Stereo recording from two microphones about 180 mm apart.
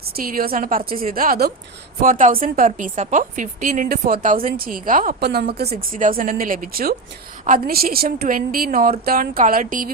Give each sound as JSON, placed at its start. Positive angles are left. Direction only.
{"t": 0.2, "sound": "a woman's voice", "side_deg": -55}
{"t": 2.0, "sound": "a woman's voice", "side_deg": -45}
{"t": 5.7, "sound": "a woman's voice", "side_deg": -50}